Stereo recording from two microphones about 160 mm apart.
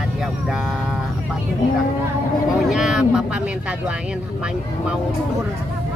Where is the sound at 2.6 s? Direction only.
Centre (ahead or behind).